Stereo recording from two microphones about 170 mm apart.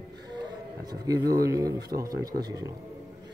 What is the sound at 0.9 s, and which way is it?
Speech, 20° right (ahead or behind).